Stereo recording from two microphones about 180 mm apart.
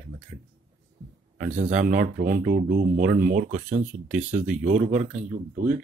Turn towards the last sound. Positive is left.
turn(degrees=-45)  # may be behind; listen again after turning